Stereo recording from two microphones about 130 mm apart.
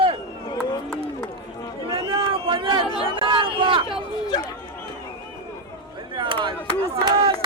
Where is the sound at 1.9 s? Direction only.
40° right (ahead or behind).